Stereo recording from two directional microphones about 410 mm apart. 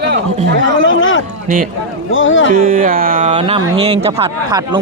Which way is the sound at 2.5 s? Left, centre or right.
Centre.